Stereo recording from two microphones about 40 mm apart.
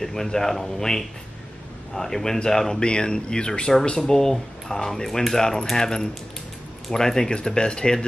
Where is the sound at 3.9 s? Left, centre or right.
Centre.